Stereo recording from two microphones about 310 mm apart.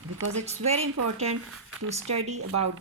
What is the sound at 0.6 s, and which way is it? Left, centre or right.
Speech, right.